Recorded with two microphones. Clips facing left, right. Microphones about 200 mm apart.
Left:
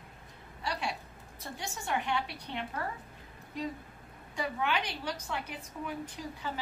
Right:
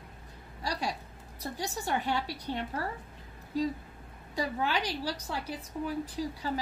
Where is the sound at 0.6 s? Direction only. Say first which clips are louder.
Right 2 dB; 40° right (ahead or behind).